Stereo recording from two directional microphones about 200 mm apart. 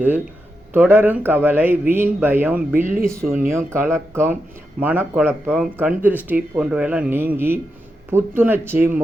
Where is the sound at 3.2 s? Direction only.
45° right (ahead or behind).